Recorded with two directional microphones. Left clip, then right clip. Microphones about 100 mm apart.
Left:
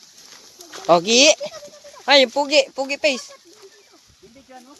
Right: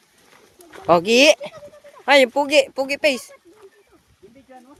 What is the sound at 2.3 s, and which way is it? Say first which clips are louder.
Speech: right 1 dB; 65° right (ahead or behind).